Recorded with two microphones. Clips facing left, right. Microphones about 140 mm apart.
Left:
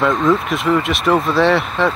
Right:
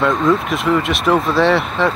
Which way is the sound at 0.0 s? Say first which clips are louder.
Even; centre (ahead or behind).